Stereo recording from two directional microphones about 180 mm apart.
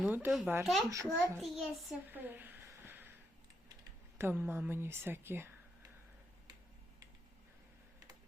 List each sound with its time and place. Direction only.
0.0 s a child's voice: 5° right (ahead or behind)
0.9 s a woman's voice: 15° right (ahead or behind)
1.4 s a child's voice: centre (ahead or behind)
2.0 s a sound: 10° right (ahead or behind)
4.2 s a woman's voice: 10° right (ahead or behind)